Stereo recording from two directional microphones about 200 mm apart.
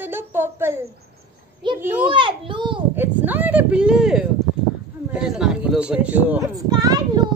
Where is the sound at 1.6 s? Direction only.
25° right (ahead or behind).